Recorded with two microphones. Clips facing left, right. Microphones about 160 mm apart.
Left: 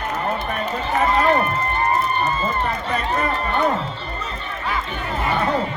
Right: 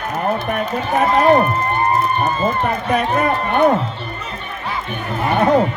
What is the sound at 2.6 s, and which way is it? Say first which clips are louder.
Speech: right 5 dB; 60° right (ahead or behind).